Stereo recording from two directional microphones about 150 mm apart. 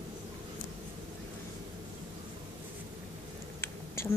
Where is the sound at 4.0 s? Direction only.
20° left (ahead or behind).